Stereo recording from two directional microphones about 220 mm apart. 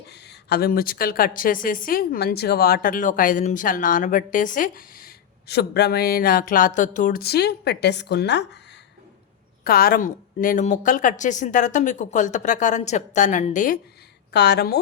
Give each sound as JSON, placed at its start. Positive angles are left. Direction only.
{"t": 0.1, "sound": "a woman's voice", "side_deg": 50}
{"t": 9.6, "sound": "a woman's voice", "side_deg": 40}
{"t": 14.3, "sound": "speech", "side_deg": 50}